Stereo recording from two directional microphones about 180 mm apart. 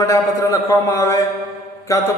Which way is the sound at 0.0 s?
15° left (ahead or behind).